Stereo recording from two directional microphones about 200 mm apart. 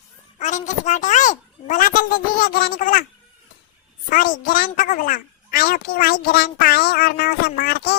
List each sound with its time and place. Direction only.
0.3 s a sound: 35° left (ahead or behind)
2.4 s speech: 50° left (ahead or behind)
4.1 s a woman's voice: 45° left (ahead or behind)